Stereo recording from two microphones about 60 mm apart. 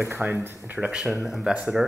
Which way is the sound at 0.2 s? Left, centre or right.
Right.